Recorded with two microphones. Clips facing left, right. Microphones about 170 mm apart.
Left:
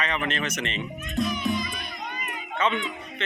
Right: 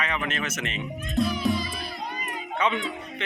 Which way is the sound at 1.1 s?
30° right (ahead or behind).